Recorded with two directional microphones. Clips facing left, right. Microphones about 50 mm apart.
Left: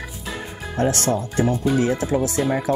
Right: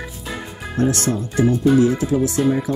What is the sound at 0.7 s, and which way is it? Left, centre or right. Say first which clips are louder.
Speech: right 1 dB; left.